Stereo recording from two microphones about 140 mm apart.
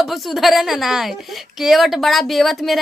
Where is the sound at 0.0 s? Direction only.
Centre (ahead or behind).